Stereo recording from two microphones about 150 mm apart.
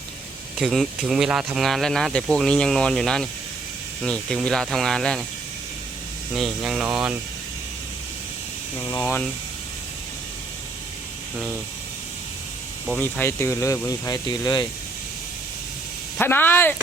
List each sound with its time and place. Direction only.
0.6 s speech: centre (ahead or behind)
6.3 s speech: centre (ahead or behind)
8.8 s speech: 25° left (ahead or behind)
13.0 s speech: 15° left (ahead or behind)
16.1 s speech: 15° left (ahead or behind)